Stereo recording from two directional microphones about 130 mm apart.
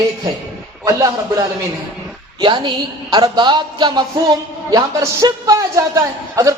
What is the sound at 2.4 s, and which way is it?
A woman's voice, 35° right (ahead or behind).